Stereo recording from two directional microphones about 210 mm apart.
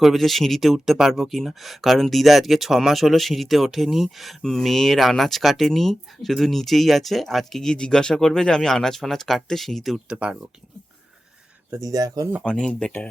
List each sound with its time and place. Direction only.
0.0 s speech: centre (ahead or behind)
11.7 s speech: 15° right (ahead or behind)
12.4 s speech: 5° left (ahead or behind)